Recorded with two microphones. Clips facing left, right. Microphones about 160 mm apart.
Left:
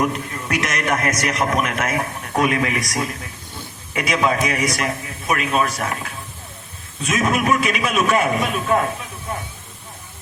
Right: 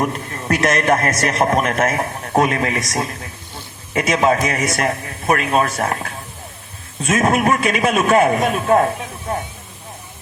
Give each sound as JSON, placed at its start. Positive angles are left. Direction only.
{"t": 0.0, "sound": "a man's voice", "side_deg": -45}
{"t": 0.6, "sound": "a man's voice", "side_deg": -30}
{"t": 1.4, "sound": "speech", "side_deg": -45}
{"t": 3.9, "sound": "a man's voice", "side_deg": -45}